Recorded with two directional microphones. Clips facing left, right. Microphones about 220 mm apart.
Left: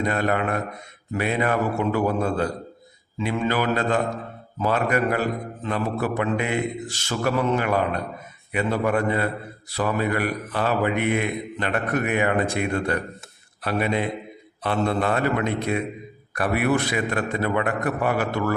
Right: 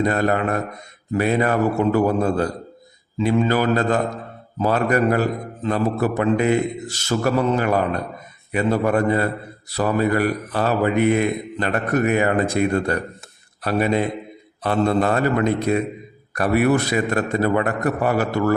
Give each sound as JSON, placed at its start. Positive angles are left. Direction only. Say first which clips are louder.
{"t": 0.0, "sound": "a man's voice", "louder": "right 4 dB", "side_deg": -40}